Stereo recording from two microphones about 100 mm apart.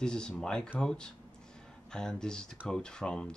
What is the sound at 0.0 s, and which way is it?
Speech, 10° left (ahead or behind).